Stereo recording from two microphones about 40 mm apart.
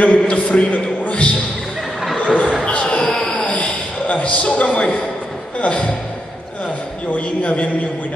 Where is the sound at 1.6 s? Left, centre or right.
Centre.